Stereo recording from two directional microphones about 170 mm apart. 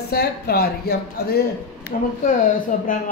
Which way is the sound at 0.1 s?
65° left (ahead or behind).